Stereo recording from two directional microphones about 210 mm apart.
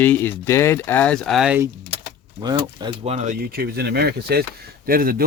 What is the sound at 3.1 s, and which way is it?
Speech, 40° right (ahead or behind).